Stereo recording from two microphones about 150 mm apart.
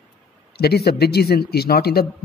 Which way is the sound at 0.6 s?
90° left.